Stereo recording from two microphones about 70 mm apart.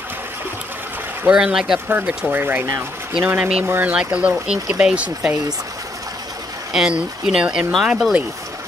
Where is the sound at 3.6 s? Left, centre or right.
Right.